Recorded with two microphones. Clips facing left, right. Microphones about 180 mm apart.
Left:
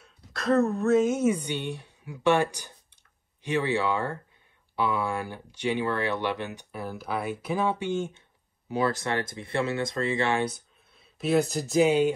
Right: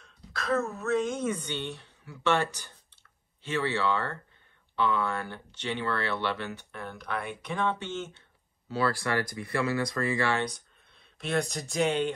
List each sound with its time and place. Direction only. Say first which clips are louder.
0.0 s a woman's voice: left 5 dB; centre (ahead or behind); by 10.4 s 20° left (ahead or behind)
10.4 s speech: left 4 dB; 5° left (ahead or behind)